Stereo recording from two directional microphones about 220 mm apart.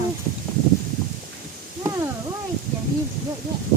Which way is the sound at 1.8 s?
15° right (ahead or behind).